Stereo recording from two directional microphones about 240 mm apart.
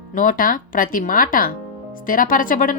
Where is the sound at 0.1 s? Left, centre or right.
Left.